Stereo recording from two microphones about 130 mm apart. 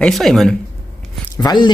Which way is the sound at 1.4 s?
35° left (ahead or behind).